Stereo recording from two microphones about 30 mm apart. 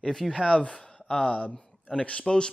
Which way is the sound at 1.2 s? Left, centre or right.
Left.